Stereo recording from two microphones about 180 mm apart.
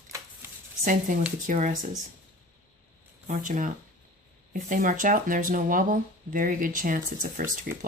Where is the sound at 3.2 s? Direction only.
45° right (ahead or behind).